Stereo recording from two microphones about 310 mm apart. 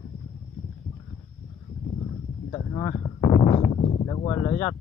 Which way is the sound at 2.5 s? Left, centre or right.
Centre.